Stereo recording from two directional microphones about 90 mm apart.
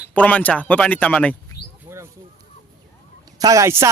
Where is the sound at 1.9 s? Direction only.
30° right (ahead or behind).